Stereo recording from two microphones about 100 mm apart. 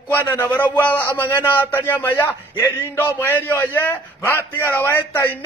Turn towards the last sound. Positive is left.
turn(degrees=20)  # may be behind; listen again after turning